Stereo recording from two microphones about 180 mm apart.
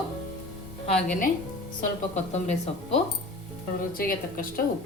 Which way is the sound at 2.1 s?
40° left (ahead or behind).